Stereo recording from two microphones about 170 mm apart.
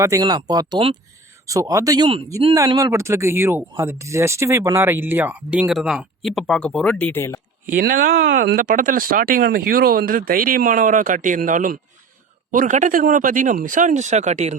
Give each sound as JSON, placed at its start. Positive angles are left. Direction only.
{"t": 0.0, "sound": "speech", "side_deg": -20}
{"t": 7.7, "sound": "speech", "side_deg": -55}
{"t": 8.5, "sound": "speech", "side_deg": -50}